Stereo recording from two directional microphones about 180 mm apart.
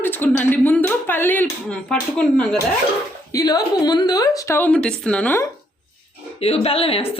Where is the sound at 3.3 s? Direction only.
20° left (ahead or behind).